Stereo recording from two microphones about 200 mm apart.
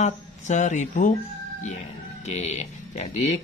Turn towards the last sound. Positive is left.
turn(degrees=35)  # may be behind; listen again after turning